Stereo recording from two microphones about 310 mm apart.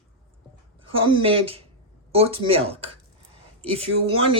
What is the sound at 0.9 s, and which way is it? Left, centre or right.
Speech, centre.